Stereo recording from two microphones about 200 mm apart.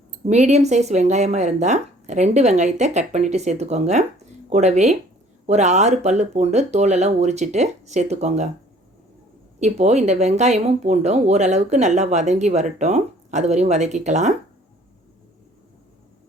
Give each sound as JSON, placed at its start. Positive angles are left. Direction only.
{"t": 0.3, "sound": "speech", "side_deg": -35}
{"t": 9.6, "sound": "speech", "side_deg": -35}